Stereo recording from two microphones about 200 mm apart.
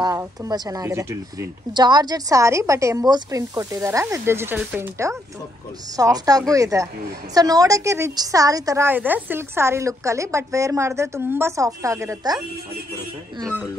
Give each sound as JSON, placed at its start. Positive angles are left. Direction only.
{"t": 0.0, "sound": "speech", "side_deg": -15}